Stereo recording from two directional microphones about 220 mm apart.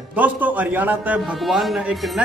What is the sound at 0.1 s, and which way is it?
A man's voice, 5° right (ahead or behind).